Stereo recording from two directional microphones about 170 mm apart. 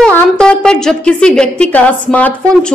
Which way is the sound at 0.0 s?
5° left (ahead or behind).